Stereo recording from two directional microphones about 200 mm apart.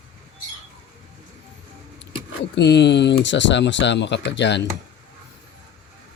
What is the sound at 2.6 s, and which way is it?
Speech, 60° left (ahead or behind).